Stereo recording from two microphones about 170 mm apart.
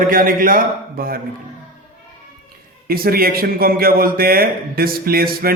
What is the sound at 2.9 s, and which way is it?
A man's voice, 60° right (ahead or behind).